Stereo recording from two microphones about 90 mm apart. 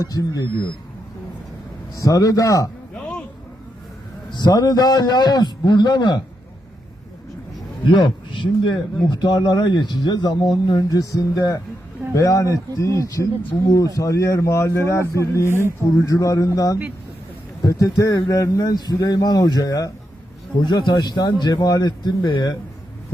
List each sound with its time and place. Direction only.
0.0 s speech: 40° left (ahead or behind)
2.0 s speech: 40° left (ahead or behind)
2.9 s a sound: 10° left (ahead or behind)
4.3 s speech: 55° left (ahead or behind)
7.9 s a man's voice: 60° left (ahead or behind); by 15.0 s 30° left (ahead or behind)
15.0 s speech: 35° right (ahead or behind)
15.3 s speech: 35° left (ahead or behind)
20.6 s speech: 55° left (ahead or behind)